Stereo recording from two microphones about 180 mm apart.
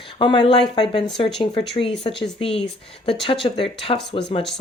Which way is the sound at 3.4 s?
30° left (ahead or behind).